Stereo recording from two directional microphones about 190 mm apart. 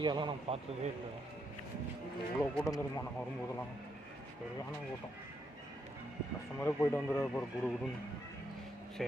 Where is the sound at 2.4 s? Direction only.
15° left (ahead or behind).